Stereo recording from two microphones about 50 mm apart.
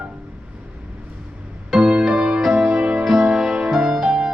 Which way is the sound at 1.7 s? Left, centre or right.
Centre.